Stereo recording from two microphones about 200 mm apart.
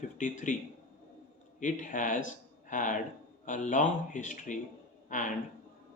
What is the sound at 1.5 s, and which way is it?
Speech, 40° left (ahead or behind).